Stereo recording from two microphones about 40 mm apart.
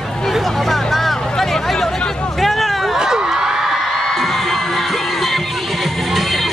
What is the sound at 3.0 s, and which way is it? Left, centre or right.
Whoop, centre.